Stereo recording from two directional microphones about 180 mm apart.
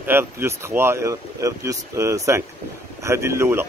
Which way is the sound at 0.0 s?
10° right (ahead or behind).